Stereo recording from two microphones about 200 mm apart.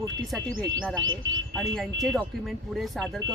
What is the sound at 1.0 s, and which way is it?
Speech, 75° right (ahead or behind).